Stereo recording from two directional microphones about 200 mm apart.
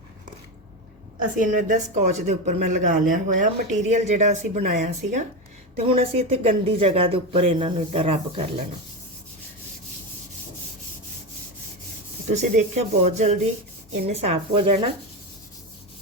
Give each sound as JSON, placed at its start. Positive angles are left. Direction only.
{"t": 1.5, "sound": "speech", "side_deg": -40}
{"t": 5.7, "sound": "speech", "side_deg": -30}
{"t": 12.3, "sound": "speech", "side_deg": -35}